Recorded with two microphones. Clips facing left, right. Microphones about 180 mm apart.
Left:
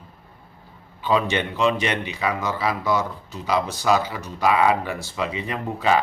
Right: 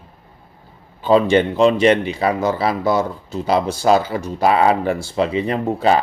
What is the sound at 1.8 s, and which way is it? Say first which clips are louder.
Speech: right 10 dB; 30° right (ahead or behind).